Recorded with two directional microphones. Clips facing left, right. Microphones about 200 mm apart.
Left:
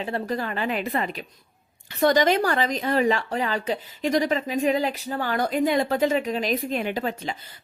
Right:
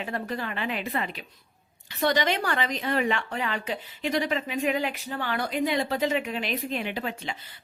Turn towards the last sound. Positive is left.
turn(degrees=40)  # may be behind; listen again after turning